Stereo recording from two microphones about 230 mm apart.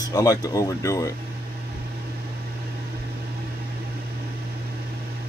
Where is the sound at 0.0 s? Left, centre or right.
Centre.